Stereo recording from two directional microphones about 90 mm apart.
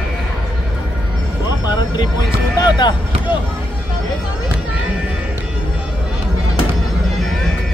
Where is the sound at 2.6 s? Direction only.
55° left (ahead or behind).